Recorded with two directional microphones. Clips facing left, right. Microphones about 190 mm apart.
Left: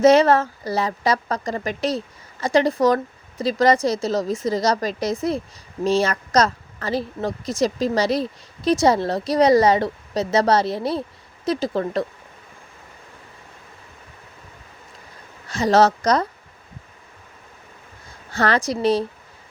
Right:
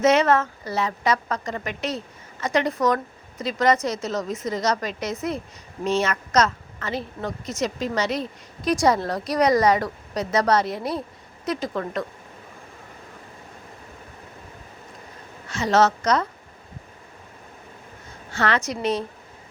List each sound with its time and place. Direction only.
0.0 s a woman's voice: 35° left (ahead or behind)
15.4 s a woman's voice: 35° left (ahead or behind)
18.3 s a woman's voice: 35° left (ahead or behind)